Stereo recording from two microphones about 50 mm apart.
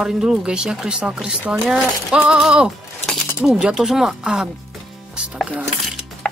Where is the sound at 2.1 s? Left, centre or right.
Right.